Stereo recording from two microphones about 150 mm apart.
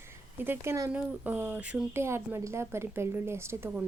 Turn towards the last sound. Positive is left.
turn(degrees=-10)  # may be behind; listen again after turning